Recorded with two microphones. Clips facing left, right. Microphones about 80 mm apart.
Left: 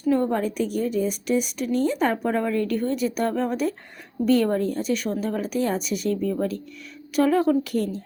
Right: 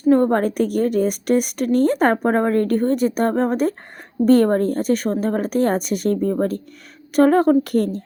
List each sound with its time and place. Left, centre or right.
0.1 s a woman's voice: right